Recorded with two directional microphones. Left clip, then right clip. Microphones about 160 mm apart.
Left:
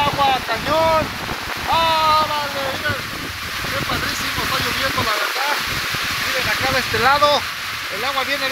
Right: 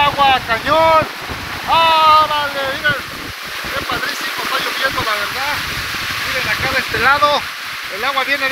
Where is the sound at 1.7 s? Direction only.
10° left (ahead or behind).